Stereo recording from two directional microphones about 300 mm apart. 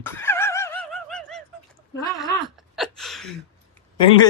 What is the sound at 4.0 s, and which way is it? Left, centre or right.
Speech, centre.